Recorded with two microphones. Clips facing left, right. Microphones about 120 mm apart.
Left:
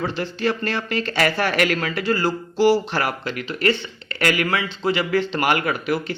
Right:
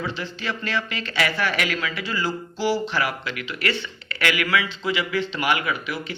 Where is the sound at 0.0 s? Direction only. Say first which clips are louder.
Left 6 dB; 45° left (ahead or behind).